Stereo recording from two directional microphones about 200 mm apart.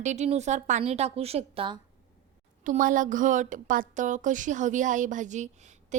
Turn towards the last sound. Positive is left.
turn(degrees=-35)  # may be behind; listen again after turning